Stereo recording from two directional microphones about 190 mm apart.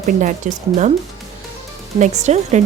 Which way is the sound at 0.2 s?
40° right (ahead or behind).